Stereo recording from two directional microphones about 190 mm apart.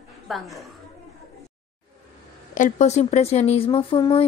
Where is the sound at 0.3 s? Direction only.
Centre (ahead or behind).